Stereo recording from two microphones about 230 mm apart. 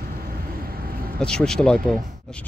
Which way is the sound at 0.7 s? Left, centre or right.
Right.